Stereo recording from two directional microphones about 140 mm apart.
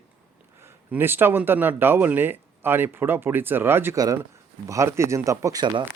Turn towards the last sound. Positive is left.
turn(degrees=-30)  # may be behind; listen again after turning